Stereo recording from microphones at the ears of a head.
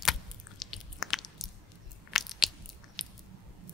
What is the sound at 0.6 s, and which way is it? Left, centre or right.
Biting, left.